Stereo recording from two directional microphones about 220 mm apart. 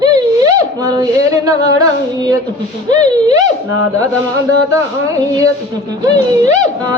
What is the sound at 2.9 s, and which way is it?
Speech, 20° right (ahead or behind).